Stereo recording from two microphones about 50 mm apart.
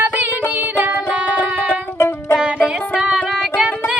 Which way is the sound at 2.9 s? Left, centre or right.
Centre.